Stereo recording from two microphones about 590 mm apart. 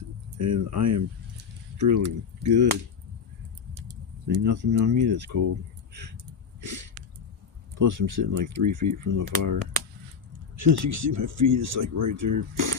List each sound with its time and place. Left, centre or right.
0.3 s speech: right
4.3 s speech: right
6.6 s a sound: right
7.8 s speech: right
10.6 s speech: right